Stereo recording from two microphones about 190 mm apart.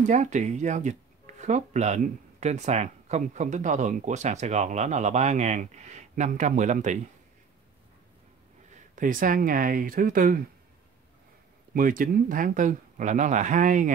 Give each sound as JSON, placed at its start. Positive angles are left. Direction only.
{"t": 0.0, "sound": "speech", "side_deg": -40}
{"t": 8.7, "sound": "speech", "side_deg": -45}
{"t": 11.7, "sound": "speech", "side_deg": -45}